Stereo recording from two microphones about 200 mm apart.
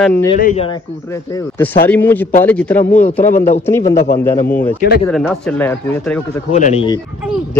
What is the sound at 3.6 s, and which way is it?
Speech, 15° left (ahead or behind).